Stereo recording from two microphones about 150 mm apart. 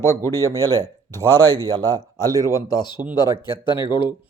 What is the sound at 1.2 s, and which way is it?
Speech, 15° left (ahead or behind).